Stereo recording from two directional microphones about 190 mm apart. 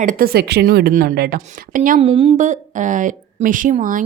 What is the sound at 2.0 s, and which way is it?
A woman's voice, 30° right (ahead or behind).